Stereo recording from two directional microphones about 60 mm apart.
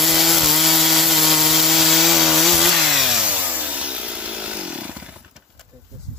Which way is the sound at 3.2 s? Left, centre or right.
Right.